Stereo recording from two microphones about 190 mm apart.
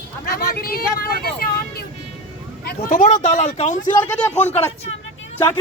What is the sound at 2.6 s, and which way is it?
Speech, 45° left (ahead or behind).